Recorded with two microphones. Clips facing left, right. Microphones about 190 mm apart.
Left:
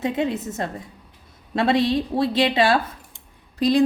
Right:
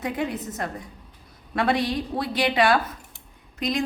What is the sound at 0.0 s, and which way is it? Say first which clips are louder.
A woman's voice: left 4 dB; 25° left (ahead or behind).